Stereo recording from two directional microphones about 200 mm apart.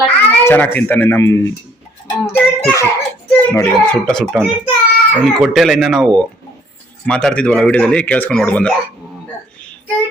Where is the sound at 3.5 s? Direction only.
10° left (ahead or behind).